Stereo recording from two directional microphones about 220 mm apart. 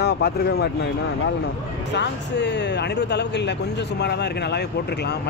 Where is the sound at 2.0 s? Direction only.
50° left (ahead or behind).